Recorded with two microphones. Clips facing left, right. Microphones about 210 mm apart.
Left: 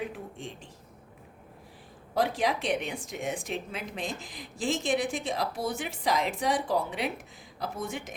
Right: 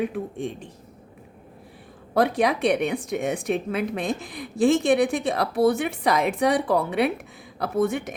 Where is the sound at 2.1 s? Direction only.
60° right (ahead or behind).